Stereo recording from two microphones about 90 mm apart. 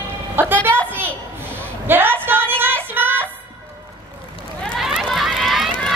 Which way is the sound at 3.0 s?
20° right (ahead or behind).